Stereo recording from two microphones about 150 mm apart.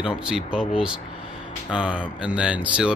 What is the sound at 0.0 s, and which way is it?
Speech, 5° right (ahead or behind).